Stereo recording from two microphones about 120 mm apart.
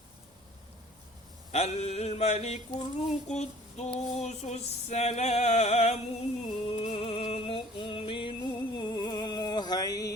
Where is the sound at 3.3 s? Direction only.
70° left (ahead or behind).